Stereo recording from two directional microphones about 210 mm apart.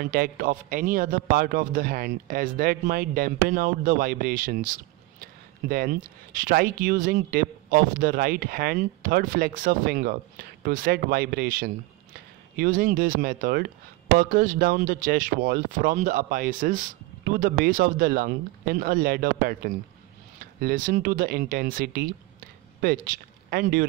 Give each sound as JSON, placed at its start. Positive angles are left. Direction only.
{"t": 0.0, "sound": "speech", "side_deg": -45}